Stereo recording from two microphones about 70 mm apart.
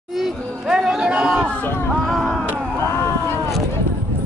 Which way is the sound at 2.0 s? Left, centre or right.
Centre.